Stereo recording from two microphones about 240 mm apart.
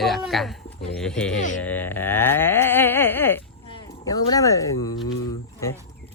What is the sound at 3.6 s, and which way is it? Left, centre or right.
Speech, centre.